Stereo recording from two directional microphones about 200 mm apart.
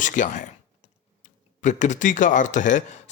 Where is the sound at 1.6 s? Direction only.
40° left (ahead or behind).